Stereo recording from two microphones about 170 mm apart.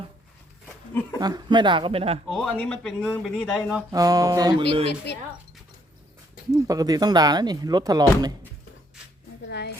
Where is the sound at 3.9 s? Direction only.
20° right (ahead or behind).